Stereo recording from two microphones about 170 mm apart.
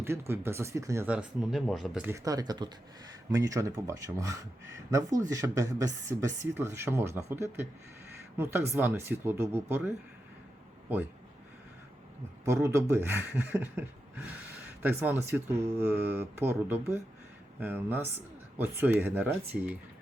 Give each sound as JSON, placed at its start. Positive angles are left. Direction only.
{"t": 0.0, "sound": "speech", "side_deg": -15}
{"t": 2.0, "sound": "speech", "side_deg": -20}
{"t": 12.5, "sound": "speech", "side_deg": -15}